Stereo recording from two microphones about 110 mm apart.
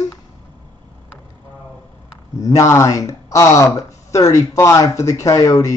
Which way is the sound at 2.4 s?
30° left (ahead or behind).